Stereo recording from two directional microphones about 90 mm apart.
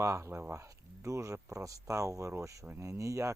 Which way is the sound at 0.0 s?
35° right (ahead or behind).